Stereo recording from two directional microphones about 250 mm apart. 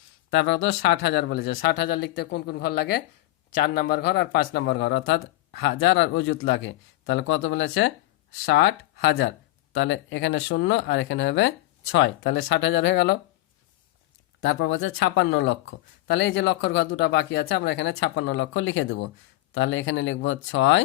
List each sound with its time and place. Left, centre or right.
0.3 s speech: left
14.4 s speech: left